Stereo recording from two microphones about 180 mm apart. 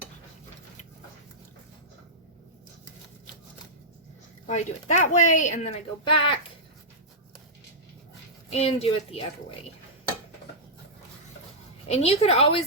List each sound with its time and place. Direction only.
4.4 s speech: 40° left (ahead or behind)
8.4 s speech: 35° left (ahead or behind)
11.9 s speech: 35° left (ahead or behind)